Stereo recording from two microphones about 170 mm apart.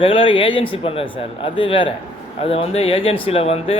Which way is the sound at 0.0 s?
30° left (ahead or behind).